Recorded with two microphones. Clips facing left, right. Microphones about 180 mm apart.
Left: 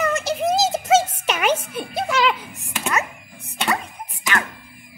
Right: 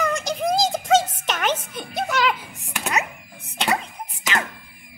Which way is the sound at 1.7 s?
5° left (ahead or behind).